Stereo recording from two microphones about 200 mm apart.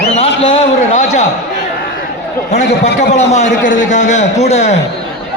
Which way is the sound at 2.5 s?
35° left (ahead or behind).